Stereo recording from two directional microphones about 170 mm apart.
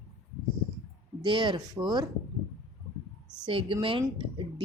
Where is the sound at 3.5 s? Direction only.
30° right (ahead or behind).